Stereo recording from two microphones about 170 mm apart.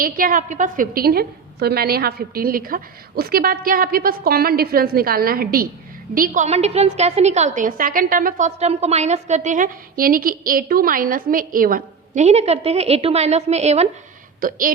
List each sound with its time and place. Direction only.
0.0 s a woman's voice: 55° right (ahead or behind)